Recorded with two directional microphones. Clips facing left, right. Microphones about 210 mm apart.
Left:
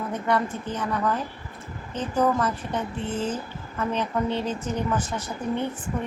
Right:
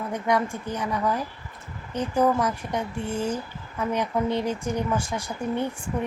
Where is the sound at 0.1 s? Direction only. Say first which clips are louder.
Right 1 dB; 10° right (ahead or behind).